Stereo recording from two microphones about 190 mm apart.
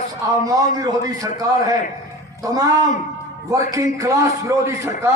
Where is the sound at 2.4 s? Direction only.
20° right (ahead or behind).